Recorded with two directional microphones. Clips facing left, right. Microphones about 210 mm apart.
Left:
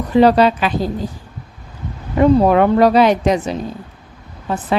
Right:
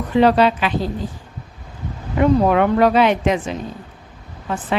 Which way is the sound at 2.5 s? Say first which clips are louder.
Left 3 dB; 35° left (ahead or behind).